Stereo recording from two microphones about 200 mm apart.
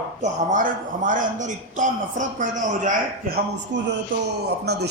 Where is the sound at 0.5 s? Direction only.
40° right (ahead or behind).